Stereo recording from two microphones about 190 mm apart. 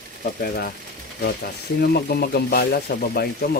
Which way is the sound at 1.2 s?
55° left (ahead or behind).